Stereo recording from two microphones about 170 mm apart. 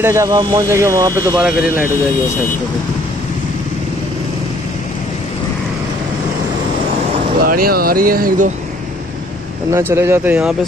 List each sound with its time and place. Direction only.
0.0 s speech: 15° right (ahead or behind)
7.4 s speech: 60° right (ahead or behind)
9.7 s speech: 15° right (ahead or behind)